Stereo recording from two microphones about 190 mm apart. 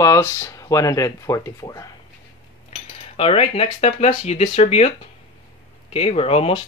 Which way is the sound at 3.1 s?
30° left (ahead or behind).